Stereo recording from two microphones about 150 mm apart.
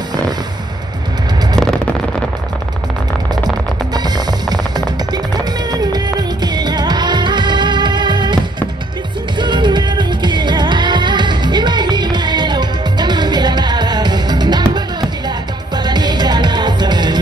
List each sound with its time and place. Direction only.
3.9 s music: 25° right (ahead or behind)
9.4 s music: 30° right (ahead or behind)